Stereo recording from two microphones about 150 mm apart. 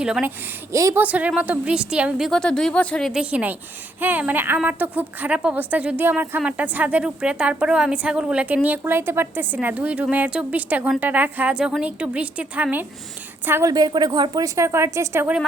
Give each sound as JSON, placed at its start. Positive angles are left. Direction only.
{"t": 0.0, "sound": "a woman's voice", "side_deg": -10}
{"t": 1.0, "sound": "a woman's voice", "side_deg": -10}
{"t": 3.1, "sound": "a woman's voice", "side_deg": -5}